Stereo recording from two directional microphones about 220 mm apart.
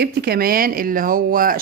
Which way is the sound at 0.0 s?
45° right (ahead or behind).